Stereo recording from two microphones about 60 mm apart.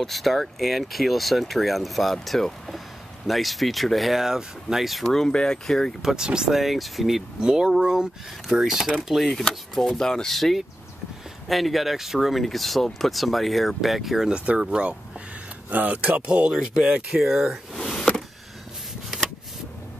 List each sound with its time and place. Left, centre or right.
0.0 s speech: centre
6.0 s speech: centre
6.6 s speech: centre
14.3 s speech: right
15.7 s speech: right; by 17.6 s centre
17.7 s a sound: centre